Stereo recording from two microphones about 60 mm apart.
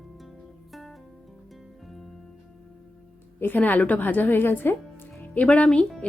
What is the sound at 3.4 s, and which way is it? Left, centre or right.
Speech, left.